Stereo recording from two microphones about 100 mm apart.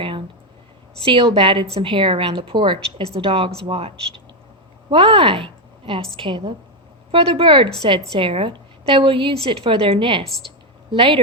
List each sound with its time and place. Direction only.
1.0 s a woman's voice: 65° right (ahead or behind)
7.1 s a woman's voice: 65° right (ahead or behind)
10.2 s speech: 5° left (ahead or behind)
10.9 s a woman's voice: 60° right (ahead or behind)